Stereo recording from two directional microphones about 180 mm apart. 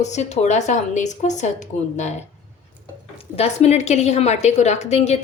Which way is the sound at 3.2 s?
35° left (ahead or behind).